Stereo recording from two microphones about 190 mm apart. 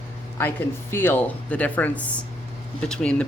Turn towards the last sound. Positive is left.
turn(degrees=5)  # may be behind; listen again after turning